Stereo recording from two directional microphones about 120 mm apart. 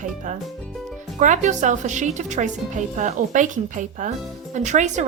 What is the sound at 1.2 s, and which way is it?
A woman's voice, 90° right.